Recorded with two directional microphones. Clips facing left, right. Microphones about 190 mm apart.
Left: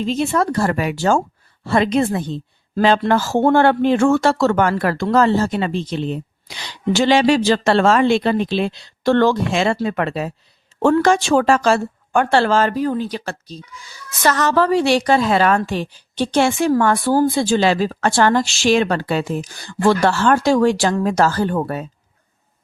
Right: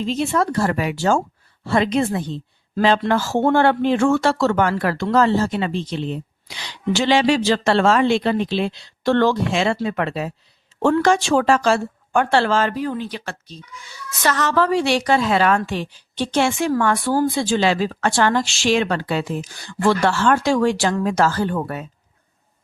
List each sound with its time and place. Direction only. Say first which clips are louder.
0.1 s a woman's voice: left 1 dB; 45° left (ahead or behind)